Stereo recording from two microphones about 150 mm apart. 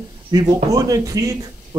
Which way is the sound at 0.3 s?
25° right (ahead or behind).